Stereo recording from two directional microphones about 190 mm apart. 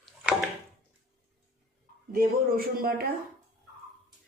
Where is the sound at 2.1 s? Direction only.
50° right (ahead or behind).